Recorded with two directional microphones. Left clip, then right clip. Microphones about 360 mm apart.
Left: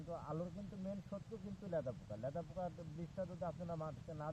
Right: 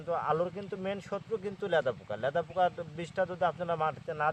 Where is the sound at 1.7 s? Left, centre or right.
Right.